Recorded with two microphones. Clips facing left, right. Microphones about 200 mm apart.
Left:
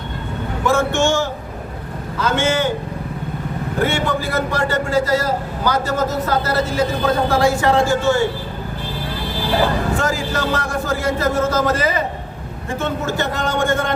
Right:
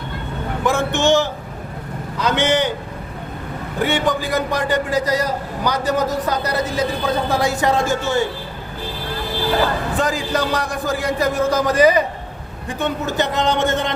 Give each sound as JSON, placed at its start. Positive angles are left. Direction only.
{"t": 0.6, "sound": "a man's voice", "side_deg": -15}
{"t": 3.8, "sound": "a man's voice", "side_deg": -15}
{"t": 10.0, "sound": "a man's voice", "side_deg": -15}